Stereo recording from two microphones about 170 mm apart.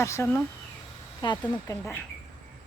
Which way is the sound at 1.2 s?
25° left (ahead or behind).